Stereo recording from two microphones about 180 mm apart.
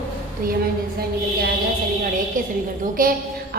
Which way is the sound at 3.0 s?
50° right (ahead or behind).